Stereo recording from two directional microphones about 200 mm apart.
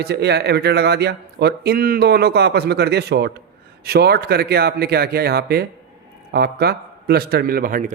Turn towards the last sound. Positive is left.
turn(degrees=-45)  # may be behind; listen again after turning